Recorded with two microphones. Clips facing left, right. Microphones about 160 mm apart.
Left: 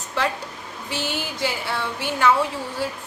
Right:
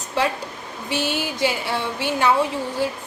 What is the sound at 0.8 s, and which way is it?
Speech, 15° right (ahead or behind).